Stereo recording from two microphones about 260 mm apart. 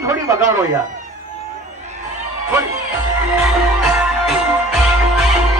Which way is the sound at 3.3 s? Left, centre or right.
Centre.